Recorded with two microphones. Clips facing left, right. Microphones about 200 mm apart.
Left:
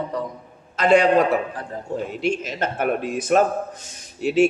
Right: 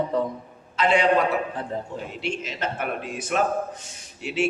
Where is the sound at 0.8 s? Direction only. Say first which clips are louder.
Left 5 dB; 45° left (ahead or behind).